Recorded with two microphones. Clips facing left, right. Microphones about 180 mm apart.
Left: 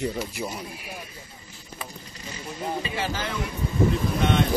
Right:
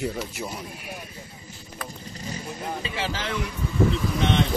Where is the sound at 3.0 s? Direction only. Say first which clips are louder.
Even; 10° left (ahead or behind).